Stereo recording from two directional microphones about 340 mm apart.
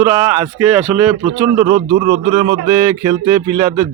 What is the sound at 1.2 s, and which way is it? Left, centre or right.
Speech, centre.